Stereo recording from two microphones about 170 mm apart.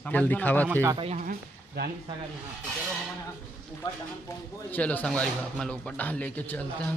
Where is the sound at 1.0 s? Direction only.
40° right (ahead or behind).